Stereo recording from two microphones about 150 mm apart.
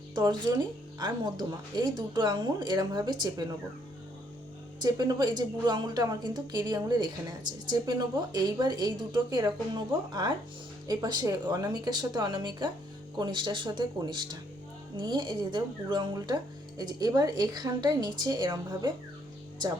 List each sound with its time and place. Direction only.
0.1 s a woman's voice: 30° right (ahead or behind)
4.8 s a woman's voice: 25° right (ahead or behind)